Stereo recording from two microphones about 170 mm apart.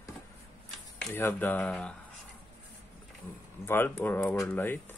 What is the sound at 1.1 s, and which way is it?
Speech, 10° left (ahead or behind).